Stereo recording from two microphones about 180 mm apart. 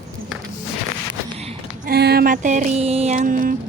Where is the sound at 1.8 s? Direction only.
60° right (ahead or behind).